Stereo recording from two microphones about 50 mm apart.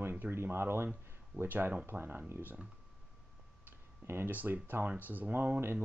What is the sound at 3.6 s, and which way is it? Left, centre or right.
Tick-tock, right.